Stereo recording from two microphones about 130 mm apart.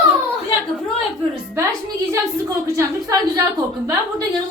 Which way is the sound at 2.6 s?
25° right (ahead or behind).